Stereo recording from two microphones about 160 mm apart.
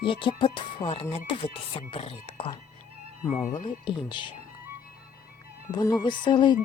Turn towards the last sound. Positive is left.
turn(degrees=30)  # may be behind; listen again after turning